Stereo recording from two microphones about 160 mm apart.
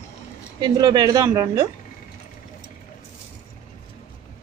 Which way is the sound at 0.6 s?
25° right (ahead or behind).